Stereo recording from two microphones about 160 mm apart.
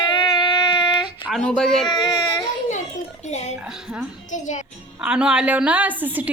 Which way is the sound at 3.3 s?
45° left (ahead or behind).